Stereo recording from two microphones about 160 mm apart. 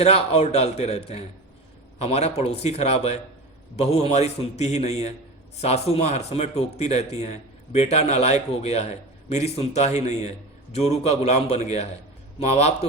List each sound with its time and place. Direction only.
0.0 s a man's voice: 40° left (ahead or behind)